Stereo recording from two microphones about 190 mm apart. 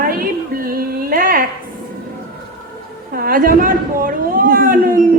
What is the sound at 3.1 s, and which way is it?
A man's voice, 50° right (ahead or behind).